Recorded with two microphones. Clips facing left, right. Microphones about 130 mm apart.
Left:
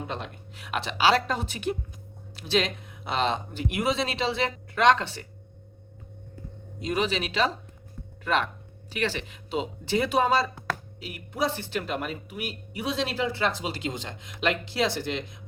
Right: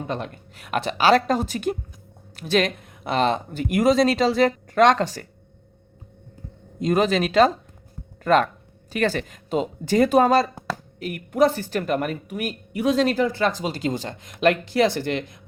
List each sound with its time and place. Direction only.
0.1 s speech: 45° right (ahead or behind)
6.7 s speech: 45° right (ahead or behind)